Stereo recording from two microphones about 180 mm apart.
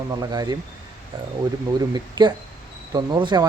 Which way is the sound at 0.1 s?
20° right (ahead or behind).